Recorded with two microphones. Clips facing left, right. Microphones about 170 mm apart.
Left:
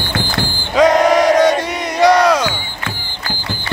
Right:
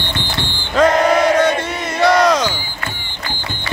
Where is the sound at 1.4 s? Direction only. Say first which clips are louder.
Left 3 dB; 15° left (ahead or behind).